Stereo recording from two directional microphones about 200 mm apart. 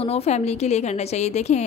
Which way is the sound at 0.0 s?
30° left (ahead or behind).